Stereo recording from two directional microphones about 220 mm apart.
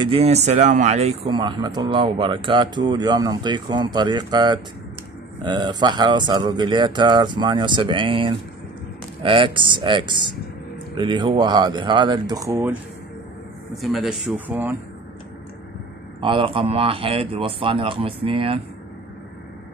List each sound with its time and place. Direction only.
0.0 s speech: 25° right (ahead or behind)
13.7 s speech: centre (ahead or behind)
16.2 s speech: 25° right (ahead or behind)